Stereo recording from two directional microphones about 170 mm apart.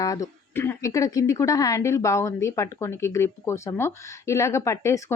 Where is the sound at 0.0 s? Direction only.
20° left (ahead or behind).